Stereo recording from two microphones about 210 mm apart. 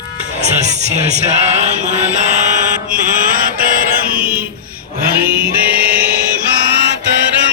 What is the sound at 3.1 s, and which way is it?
Chant, 40° right (ahead or behind).